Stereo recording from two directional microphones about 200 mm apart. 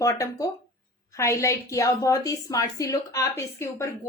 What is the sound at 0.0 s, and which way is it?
A woman's voice, 15° left (ahead or behind).